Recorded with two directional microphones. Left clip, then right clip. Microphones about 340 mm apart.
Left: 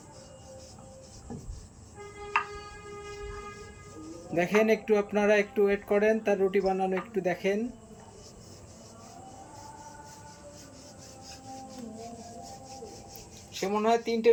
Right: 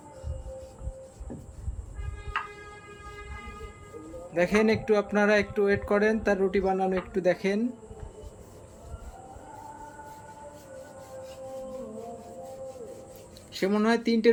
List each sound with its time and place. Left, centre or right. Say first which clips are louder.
4.4 s speech: right 1 dB; centre
13.5 s speech: even; centre